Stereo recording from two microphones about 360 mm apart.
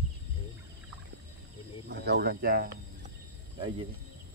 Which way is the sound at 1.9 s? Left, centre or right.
Right.